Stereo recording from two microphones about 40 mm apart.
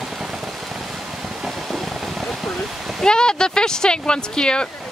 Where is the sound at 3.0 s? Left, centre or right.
Centre.